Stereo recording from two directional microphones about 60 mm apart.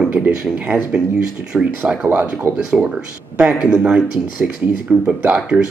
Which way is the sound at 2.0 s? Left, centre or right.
Right.